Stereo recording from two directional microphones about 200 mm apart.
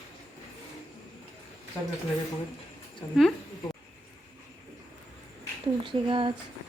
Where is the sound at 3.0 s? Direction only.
20° left (ahead or behind).